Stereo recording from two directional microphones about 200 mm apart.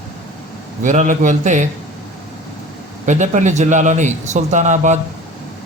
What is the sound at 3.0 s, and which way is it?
Speech, 35° right (ahead or behind).